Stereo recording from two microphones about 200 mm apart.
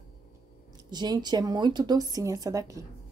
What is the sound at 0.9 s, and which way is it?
Speech, 20° right (ahead or behind).